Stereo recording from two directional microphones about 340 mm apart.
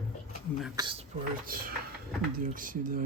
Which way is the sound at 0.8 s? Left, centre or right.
Centre.